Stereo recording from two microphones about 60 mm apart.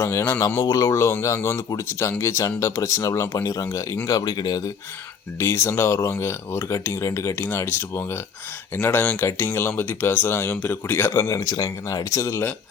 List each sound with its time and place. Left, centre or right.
0.0 s speech: left
0.6 s speech: left
0.9 s speech: left
4.0 s speech: left
5.4 s speech: left
7.4 s speech: left
11.2 s speech: left